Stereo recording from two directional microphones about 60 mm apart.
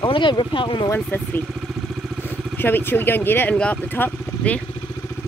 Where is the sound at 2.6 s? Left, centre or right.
Left.